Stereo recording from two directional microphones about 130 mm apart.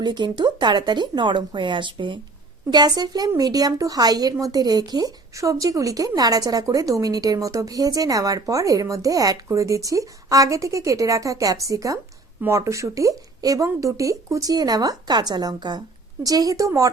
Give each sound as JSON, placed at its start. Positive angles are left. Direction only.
{"t": 0.0, "sound": "a woman's voice", "side_deg": -35}